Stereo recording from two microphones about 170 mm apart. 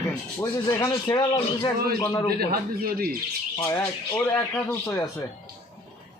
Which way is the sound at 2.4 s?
60° right (ahead or behind).